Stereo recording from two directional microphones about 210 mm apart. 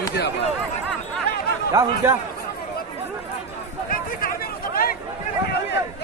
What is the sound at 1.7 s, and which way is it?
Speech, 15° right (ahead or behind).